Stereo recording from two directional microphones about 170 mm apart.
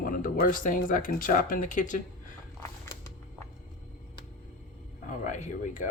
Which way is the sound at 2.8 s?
15° left (ahead or behind).